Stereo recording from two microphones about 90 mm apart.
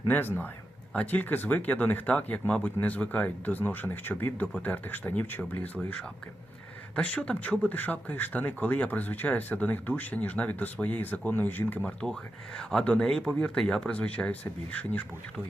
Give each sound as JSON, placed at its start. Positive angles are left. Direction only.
{"t": 0.1, "sound": "speech", "side_deg": 20}
{"t": 12.0, "sound": "speech", "side_deg": -15}
{"t": 12.5, "sound": "speech", "side_deg": 10}